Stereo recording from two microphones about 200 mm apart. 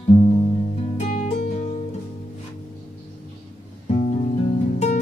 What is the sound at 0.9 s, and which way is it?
Music, 35° left (ahead or behind).